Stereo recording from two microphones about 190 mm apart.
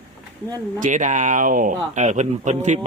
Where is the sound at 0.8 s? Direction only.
40° right (ahead or behind).